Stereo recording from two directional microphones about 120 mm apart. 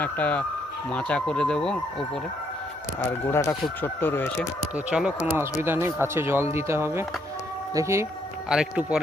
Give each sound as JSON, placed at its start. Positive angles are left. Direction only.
{"t": 0.0, "sound": "speech", "side_deg": 10}
{"t": 3.0, "sound": "speech", "side_deg": 20}
{"t": 4.9, "sound": "speech", "side_deg": -10}
{"t": 5.3, "sound": "speech", "side_deg": -20}
{"t": 8.4, "sound": "speech", "side_deg": -5}